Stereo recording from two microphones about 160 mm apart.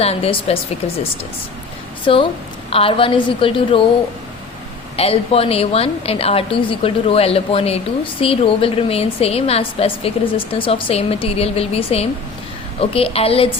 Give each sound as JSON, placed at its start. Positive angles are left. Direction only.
{"t": 0.0, "sound": "a woman's voice", "side_deg": 40}
{"t": 2.1, "sound": "a woman's voice", "side_deg": 35}
{"t": 4.9, "sound": "a woman's voice", "side_deg": 35}